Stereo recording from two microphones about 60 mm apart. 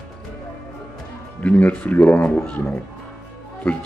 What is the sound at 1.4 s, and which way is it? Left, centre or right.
Speech, left.